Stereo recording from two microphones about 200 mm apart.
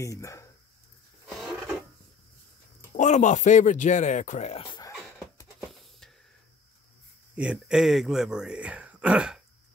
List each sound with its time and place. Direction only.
0.0 s speech: 15° left (ahead or behind)
3.0 s speech: 40° left (ahead or behind); by 4.9 s 20° left (ahead or behind)
5.7 s a sound: centre (ahead or behind)
7.3 s speech: 5° right (ahead or behind)